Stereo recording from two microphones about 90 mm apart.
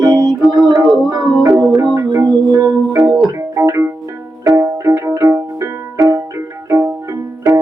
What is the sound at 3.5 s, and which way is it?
Music, 30° right (ahead or behind).